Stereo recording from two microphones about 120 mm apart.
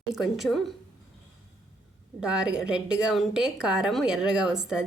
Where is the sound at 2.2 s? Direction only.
5° right (ahead or behind).